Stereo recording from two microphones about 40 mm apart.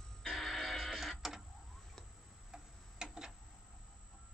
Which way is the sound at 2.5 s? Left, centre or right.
Centre.